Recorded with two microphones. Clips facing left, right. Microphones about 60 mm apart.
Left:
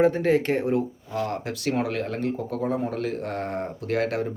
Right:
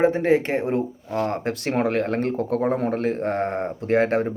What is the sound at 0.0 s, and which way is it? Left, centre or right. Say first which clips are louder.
Speech: right 2 dB; right.